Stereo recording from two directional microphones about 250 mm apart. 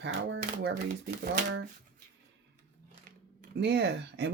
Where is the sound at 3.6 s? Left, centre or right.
Right.